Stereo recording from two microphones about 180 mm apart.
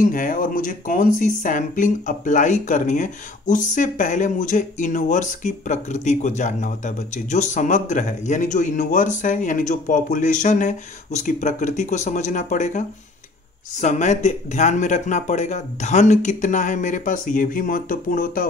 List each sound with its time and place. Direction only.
0.0 s speech: 50° left (ahead or behind)